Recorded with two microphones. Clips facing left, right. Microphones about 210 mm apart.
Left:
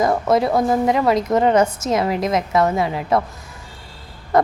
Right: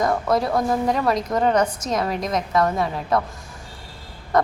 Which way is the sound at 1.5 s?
25° left (ahead or behind).